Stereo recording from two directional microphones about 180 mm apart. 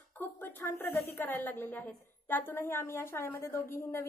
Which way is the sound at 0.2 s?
10° left (ahead or behind).